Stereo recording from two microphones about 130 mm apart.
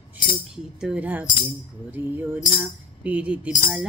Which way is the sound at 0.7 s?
10° right (ahead or behind).